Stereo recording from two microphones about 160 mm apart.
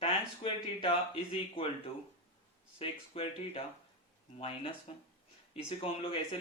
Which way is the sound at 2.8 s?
35° left (ahead or behind).